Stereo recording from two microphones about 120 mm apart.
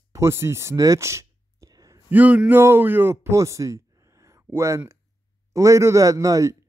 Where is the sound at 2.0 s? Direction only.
15° right (ahead or behind).